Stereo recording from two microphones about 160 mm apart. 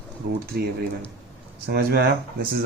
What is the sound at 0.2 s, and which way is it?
Speech, 75° right (ahead or behind).